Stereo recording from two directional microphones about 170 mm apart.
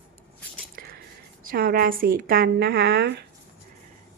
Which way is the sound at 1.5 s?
60° right (ahead or behind).